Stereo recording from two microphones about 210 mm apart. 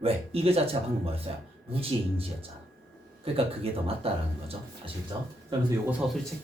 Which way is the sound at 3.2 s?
25° right (ahead or behind).